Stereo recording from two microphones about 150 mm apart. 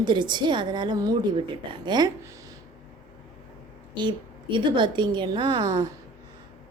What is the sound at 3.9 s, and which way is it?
A woman's voice, 30° right (ahead or behind).